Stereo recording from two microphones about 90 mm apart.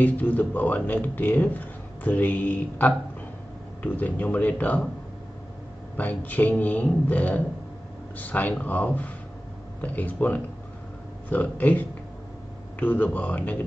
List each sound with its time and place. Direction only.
0.0 s speech: 20° left (ahead or behind)
5.9 s speech: 20° left (ahead or behind)